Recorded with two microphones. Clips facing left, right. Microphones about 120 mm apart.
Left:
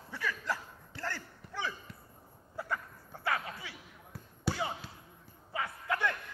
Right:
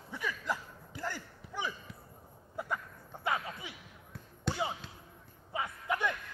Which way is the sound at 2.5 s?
15° right (ahead or behind).